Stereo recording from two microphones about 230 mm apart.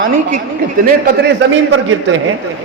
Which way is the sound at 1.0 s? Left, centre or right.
Right.